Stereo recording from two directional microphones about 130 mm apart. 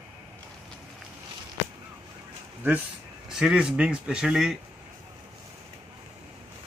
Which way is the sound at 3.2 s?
5° right (ahead or behind).